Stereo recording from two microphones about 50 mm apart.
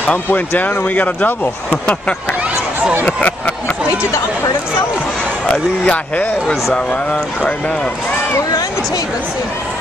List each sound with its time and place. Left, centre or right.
0.0 s speech: left
3.1 s speech: left
5.5 s speech: left
6.4 s speech: centre
6.7 s speech: left